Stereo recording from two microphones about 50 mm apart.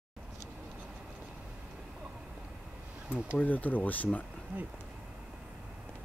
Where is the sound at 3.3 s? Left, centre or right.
Left.